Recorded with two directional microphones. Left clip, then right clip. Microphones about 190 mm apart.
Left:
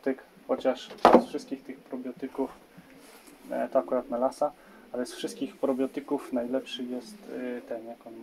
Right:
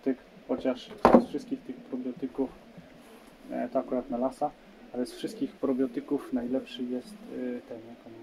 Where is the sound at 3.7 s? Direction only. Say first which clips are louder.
Left 4 dB; 10° left (ahead or behind).